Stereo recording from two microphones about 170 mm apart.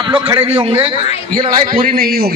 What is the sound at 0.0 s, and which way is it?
Speech, 25° right (ahead or behind).